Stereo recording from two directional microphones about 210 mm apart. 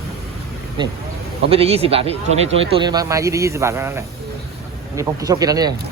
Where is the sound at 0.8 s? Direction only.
20° right (ahead or behind).